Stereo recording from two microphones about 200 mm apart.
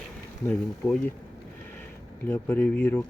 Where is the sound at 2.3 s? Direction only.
10° left (ahead or behind).